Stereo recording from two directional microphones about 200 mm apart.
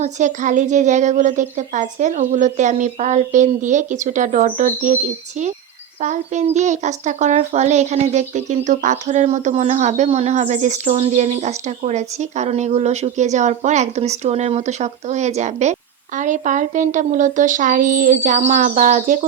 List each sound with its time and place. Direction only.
0.0 s a child's voice: 35° right (ahead or behind)
6.0 s a child's voice: 35° right (ahead or behind)